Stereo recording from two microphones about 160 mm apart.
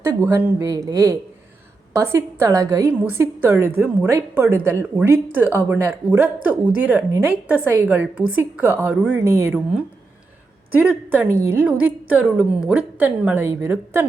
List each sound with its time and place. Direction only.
0.0 s a woman's voice: 15° right (ahead or behind)